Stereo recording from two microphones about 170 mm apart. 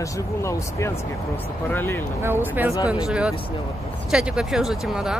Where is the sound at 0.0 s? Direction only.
15° left (ahead or behind).